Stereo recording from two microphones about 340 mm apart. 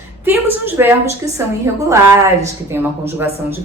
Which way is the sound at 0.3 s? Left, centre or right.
Centre.